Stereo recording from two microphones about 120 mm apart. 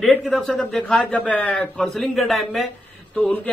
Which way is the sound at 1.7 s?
Centre (ahead or behind).